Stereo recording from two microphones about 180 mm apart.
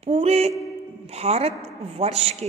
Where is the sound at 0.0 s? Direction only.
35° right (ahead or behind).